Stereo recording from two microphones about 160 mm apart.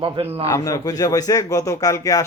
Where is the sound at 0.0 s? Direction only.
35° right (ahead or behind).